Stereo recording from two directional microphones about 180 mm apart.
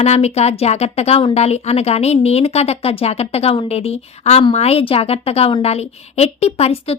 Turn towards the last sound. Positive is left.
turn(degrees=35)  # may be behind; listen again after turning